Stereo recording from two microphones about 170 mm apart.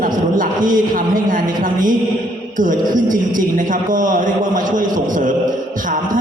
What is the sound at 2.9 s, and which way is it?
Speech, 55° right (ahead or behind).